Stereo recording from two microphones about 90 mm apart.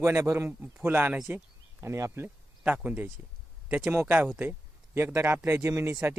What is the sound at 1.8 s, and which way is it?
Speech, 35° right (ahead or behind).